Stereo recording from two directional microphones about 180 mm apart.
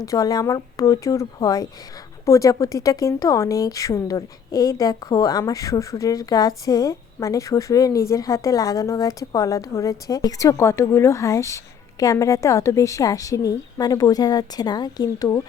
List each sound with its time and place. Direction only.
0.0 s a woman's voice: 20° left (ahead or behind)